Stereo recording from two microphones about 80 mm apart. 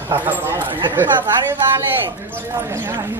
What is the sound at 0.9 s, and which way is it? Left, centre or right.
Speech, right.